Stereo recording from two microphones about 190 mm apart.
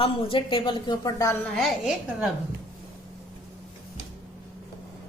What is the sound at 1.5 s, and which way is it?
Speech, centre (ahead or behind).